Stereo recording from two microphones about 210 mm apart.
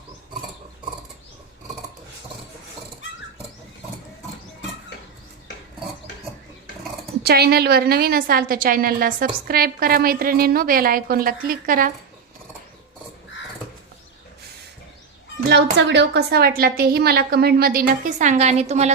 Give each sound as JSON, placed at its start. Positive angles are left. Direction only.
{"t": 7.2, "sound": "a woman's voice", "side_deg": -50}
{"t": 15.9, "sound": "a woman's voice", "side_deg": -55}